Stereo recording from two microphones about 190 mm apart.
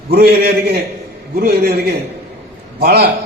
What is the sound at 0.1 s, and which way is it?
A man's voice, 55° right (ahead or behind).